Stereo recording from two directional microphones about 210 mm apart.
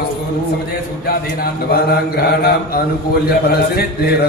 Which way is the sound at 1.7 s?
50° left (ahead or behind).